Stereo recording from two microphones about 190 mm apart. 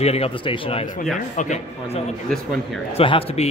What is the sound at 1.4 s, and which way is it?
A man's voice, 40° left (ahead or behind).